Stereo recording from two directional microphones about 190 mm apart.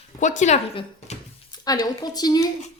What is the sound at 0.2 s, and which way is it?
Speech, 40° left (ahead or behind).